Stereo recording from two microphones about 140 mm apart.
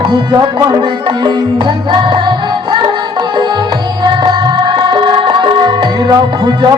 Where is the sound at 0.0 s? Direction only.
35° right (ahead or behind).